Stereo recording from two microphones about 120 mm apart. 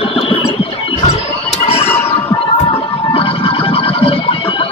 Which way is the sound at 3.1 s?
50° left (ahead or behind).